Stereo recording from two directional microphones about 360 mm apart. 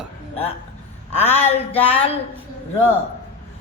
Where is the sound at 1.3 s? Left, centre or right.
Centre.